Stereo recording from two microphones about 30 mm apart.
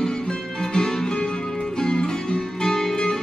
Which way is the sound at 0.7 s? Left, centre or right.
Left.